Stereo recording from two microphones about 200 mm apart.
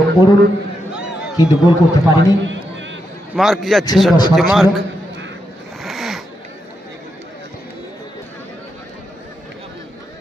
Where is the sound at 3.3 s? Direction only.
Centre (ahead or behind).